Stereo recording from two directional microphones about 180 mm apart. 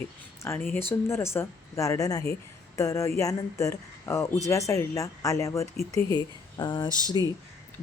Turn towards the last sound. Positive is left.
turn(degrees=20)  # may be behind; listen again after turning